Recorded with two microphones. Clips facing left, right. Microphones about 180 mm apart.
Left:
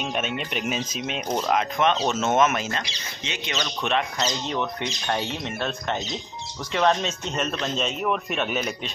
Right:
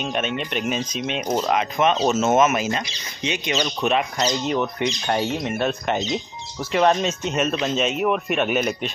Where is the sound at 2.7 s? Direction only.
15° right (ahead or behind).